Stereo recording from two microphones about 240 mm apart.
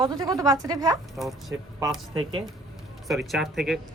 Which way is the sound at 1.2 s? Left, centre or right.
Centre.